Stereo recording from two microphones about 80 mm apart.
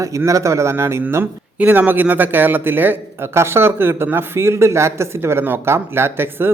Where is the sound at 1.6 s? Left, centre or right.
Right.